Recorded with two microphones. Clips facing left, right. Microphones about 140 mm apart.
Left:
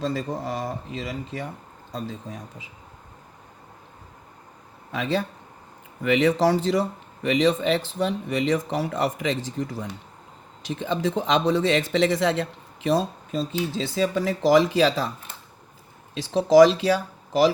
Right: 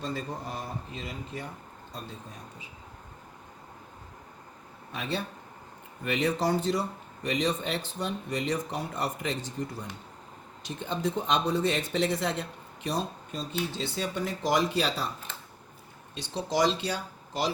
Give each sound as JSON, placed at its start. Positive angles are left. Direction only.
{"t": 0.0, "sound": "speech", "side_deg": 90}
{"t": 4.9, "sound": "speech", "side_deg": 90}
{"t": 16.1, "sound": "speech", "side_deg": 90}